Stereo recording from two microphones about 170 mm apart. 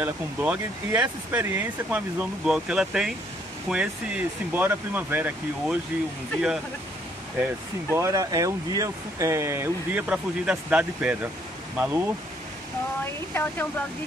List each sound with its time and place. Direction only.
0.0 s speech: 10° right (ahead or behind)
7.9 s speech: 15° right (ahead or behind)
13.3 s speech: 10° left (ahead or behind)